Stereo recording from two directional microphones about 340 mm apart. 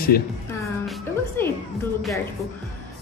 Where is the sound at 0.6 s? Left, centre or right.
Centre.